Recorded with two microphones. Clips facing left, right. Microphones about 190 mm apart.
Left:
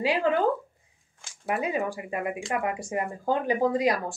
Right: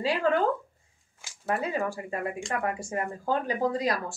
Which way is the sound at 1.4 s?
15° left (ahead or behind).